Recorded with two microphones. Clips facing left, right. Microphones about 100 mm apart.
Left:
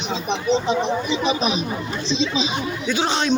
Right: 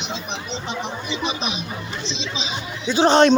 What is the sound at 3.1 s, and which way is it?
Speech, 50° right (ahead or behind).